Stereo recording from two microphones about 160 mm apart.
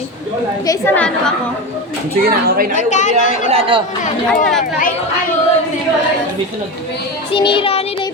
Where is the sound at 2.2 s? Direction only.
65° right (ahead or behind).